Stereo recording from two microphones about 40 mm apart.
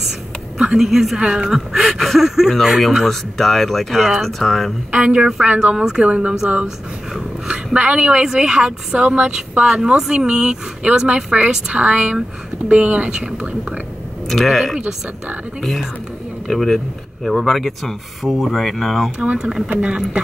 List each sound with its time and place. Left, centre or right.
0.6 s a woman's voice: centre
2.0 s speech: centre
3.1 s speech: centre
4.9 s speech: right
5.8 s speech: centre
6.0 s speech: right
7.4 s a sound: right
8.1 s speech: centre
9.0 s a woman's voice: right
9.8 s a woman's voice: centre
14.3 s speech: centre
19.3 s speech: centre